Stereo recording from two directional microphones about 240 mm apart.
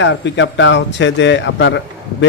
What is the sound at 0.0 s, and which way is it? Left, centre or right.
A man's voice, left.